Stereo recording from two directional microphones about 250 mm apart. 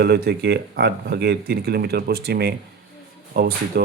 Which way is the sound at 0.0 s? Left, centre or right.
Right.